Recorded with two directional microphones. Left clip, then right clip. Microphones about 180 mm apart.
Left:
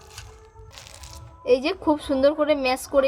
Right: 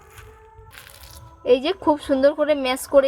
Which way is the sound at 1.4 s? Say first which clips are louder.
Right 3 dB; 40° right (ahead or behind).